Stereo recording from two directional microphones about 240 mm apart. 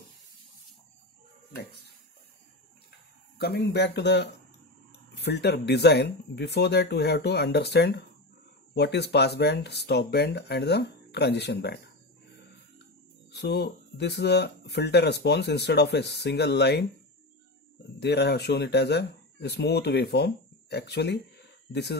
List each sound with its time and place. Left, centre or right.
3.3 s speech: left
13.3 s speech: left
17.9 s speech: left